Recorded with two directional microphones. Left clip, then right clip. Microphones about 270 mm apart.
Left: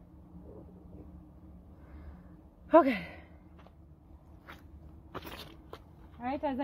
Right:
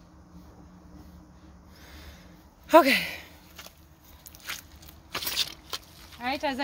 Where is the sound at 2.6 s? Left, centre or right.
Centre.